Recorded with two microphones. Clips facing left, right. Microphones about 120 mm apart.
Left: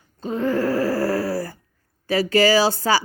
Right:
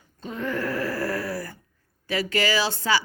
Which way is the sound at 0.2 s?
35° left (ahead or behind).